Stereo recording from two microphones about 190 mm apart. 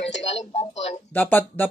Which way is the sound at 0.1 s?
35° left (ahead or behind).